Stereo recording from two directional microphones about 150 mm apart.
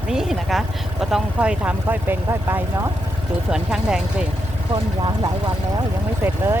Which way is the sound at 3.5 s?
5° right (ahead or behind).